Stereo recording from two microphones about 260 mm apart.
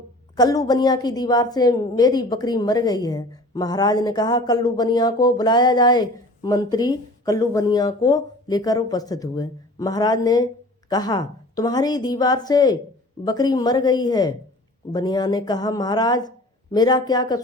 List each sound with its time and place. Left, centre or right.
0.3 s a woman's voice: centre